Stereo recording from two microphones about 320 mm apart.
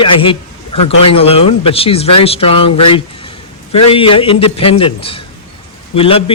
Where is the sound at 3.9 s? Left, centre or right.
Centre.